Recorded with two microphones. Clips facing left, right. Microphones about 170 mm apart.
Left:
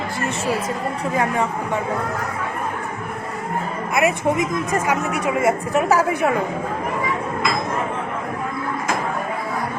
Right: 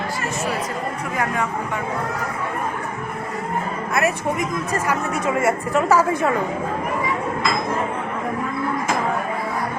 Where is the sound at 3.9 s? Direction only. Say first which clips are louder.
Left 3 dB; 15° left (ahead or behind).